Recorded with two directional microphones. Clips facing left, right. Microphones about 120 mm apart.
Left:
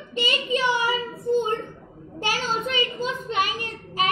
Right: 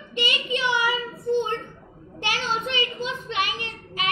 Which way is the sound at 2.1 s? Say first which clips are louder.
Left 1 dB; 40° left (ahead or behind).